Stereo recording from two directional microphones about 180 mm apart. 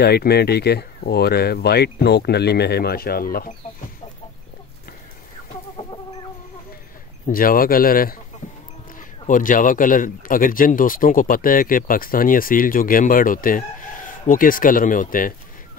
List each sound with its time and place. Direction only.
0.0 s speech: 60° left (ahead or behind)
7.2 s speech: 50° left (ahead or behind)
9.3 s speech: 50° left (ahead or behind)